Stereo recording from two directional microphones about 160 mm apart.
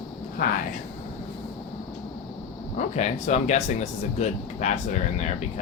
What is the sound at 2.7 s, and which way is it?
Speech, 45° left (ahead or behind).